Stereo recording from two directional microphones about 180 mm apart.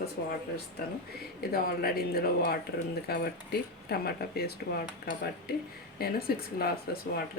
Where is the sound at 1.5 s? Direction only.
60° left (ahead or behind).